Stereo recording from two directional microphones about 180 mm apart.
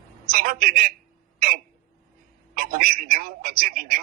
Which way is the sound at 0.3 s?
55° right (ahead or behind).